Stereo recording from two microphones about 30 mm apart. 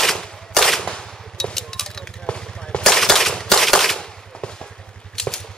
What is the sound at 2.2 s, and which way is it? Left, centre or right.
Gunshot, left.